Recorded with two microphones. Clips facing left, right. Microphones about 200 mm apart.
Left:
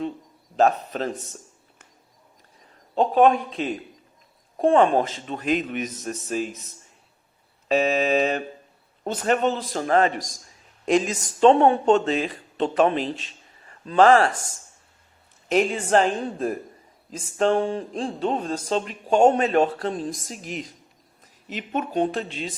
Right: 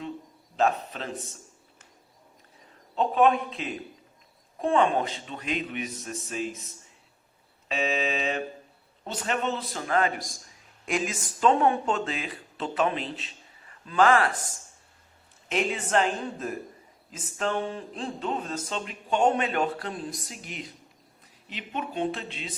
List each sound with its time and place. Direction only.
0.5 s a man's voice: 40° left (ahead or behind)
2.9 s speech: 40° left (ahead or behind)
7.7 s speech: 40° left (ahead or behind)
15.4 s speech: 40° left (ahead or behind)
20.4 s speech: centre (ahead or behind)
21.5 s speech: 45° left (ahead or behind)